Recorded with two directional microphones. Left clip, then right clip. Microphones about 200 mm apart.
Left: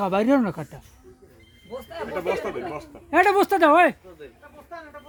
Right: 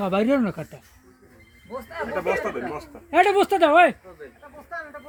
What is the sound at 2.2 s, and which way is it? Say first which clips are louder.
Speech: right 2 dB; 10° left (ahead or behind).